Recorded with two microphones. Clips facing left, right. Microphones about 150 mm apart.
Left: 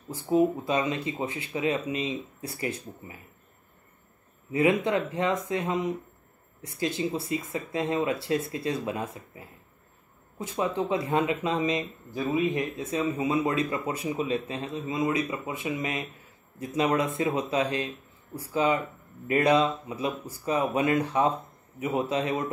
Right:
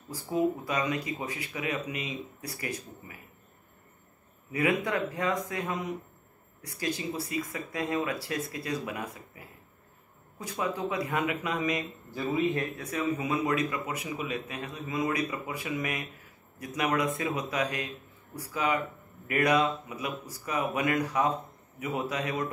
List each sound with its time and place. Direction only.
0.1 s speech: 25° left (ahead or behind)
4.5 s speech: 25° left (ahead or behind)